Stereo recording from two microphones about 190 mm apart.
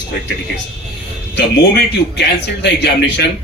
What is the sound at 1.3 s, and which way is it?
Speech, 60° left (ahead or behind).